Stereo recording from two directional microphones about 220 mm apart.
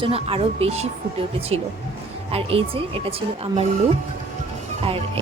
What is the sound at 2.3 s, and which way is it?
Speech, 25° right (ahead or behind).